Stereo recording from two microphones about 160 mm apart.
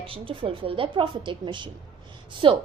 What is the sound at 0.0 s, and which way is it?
A woman's voice, 35° right (ahead or behind).